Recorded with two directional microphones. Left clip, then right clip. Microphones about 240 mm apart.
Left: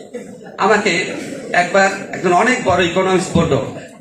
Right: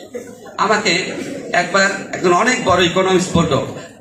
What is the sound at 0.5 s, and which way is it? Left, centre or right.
A man's voice, right.